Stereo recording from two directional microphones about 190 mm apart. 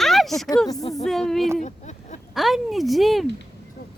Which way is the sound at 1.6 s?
40° left (ahead or behind).